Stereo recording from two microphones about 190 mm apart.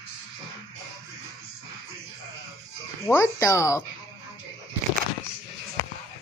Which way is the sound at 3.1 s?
15° left (ahead or behind).